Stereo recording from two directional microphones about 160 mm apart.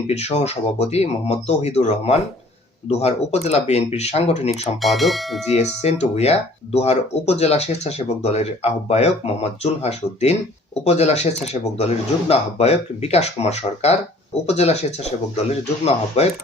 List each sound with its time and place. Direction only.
0.1 s speech: 40° left (ahead or behind)
4.8 s speech: centre (ahead or behind)
5.5 s speech: 40° left (ahead or behind)